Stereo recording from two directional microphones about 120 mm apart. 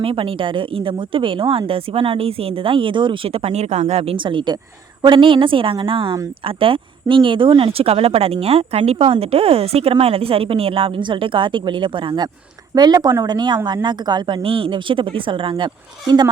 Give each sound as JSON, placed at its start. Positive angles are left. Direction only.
{"t": 0.0, "sound": "speech", "side_deg": -50}